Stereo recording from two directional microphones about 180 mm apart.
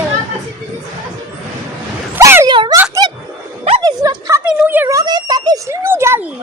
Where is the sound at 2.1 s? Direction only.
15° right (ahead or behind).